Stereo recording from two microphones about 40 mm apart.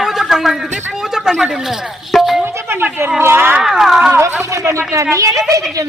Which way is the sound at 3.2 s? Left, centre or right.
Right.